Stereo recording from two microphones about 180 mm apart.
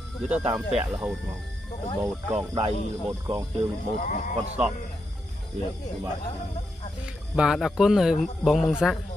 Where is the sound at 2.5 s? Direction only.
30° right (ahead or behind).